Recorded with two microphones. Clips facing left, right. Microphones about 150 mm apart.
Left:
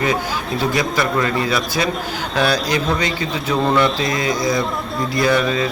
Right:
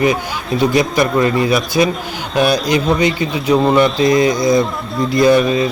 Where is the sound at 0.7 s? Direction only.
20° right (ahead or behind).